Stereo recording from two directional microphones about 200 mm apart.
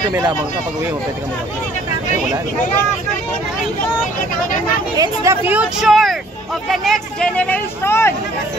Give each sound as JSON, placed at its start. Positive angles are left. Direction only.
{"t": 0.1, "sound": "speech", "side_deg": -15}
{"t": 4.9, "sound": "speech", "side_deg": -15}